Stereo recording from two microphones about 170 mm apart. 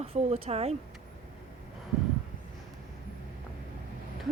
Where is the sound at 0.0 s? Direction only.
35° right (ahead or behind).